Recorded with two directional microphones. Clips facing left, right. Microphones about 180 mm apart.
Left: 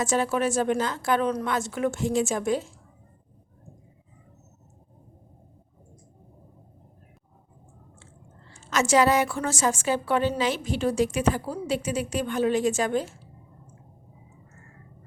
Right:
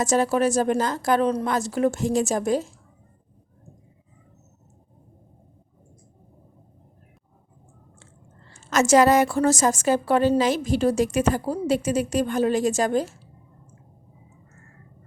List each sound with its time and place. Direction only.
0.0 s a woman's voice: 40° right (ahead or behind)
8.5 s a woman's voice: 45° right (ahead or behind)